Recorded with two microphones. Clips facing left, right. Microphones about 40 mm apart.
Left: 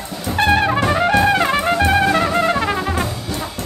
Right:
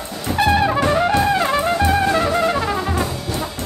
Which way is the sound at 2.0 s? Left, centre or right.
Left.